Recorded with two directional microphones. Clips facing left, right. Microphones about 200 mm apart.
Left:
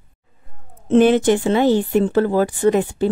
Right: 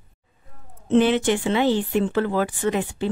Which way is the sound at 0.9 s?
45° left (ahead or behind).